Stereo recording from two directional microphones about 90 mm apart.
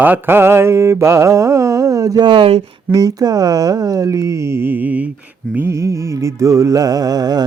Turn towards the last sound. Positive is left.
turn(degrees=-45)  # may be behind; listen again after turning